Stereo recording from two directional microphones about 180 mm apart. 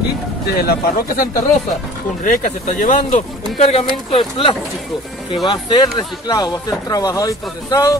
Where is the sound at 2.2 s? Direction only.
45° left (ahead or behind).